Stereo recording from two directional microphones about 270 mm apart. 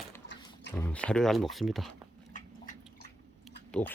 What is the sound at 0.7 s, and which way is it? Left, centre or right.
Speech, centre.